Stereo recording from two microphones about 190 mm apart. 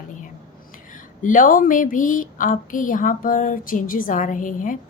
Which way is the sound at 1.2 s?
45° left (ahead or behind).